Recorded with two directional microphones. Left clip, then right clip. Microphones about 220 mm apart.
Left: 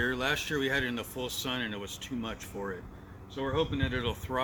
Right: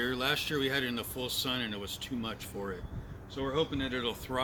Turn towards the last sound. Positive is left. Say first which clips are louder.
# left 1 dB
turn(degrees=0)  # may be behind; listen again after turning